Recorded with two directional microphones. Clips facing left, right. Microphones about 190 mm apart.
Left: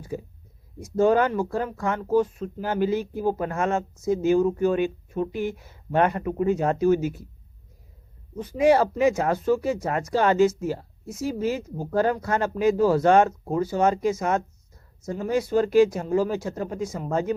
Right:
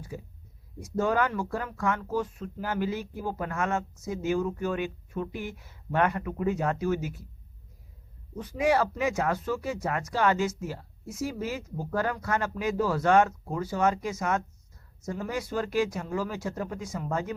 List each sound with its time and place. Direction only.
0.9 s speech: 25° left (ahead or behind)
8.5 s speech: 30° left (ahead or behind)